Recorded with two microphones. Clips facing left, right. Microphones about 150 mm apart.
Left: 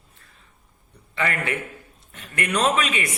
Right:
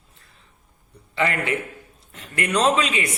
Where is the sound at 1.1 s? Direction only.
30° right (ahead or behind).